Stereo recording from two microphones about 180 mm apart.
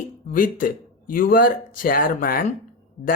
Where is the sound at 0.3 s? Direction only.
50° left (ahead or behind).